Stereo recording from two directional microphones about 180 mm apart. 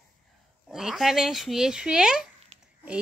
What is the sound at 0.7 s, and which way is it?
A woman's voice, 5° right (ahead or behind).